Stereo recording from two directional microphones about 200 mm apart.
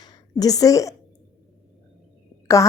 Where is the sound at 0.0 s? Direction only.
20° left (ahead or behind).